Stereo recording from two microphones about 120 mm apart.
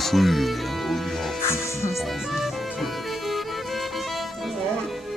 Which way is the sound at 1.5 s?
25° left (ahead or behind).